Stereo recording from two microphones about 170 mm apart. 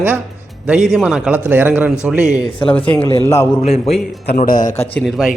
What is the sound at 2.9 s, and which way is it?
Speech, 10° left (ahead or behind).